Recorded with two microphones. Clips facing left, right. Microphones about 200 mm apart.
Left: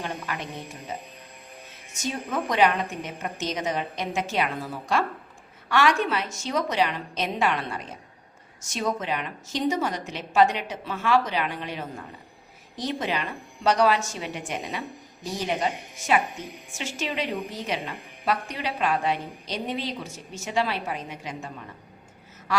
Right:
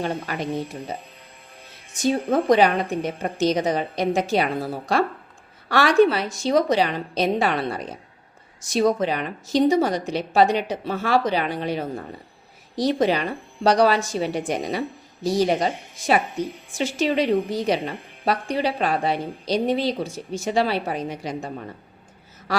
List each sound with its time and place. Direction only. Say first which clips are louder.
0.0 s a woman's voice: right 6 dB; 35° right (ahead or behind)
2.0 s a woman's voice: right 9 dB; 35° right (ahead or behind)